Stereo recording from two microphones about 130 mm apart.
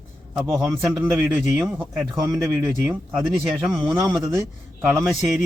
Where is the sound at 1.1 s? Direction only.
10° right (ahead or behind).